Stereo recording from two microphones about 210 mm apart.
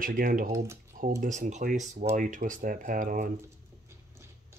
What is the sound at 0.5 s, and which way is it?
Speech, 15° right (ahead or behind).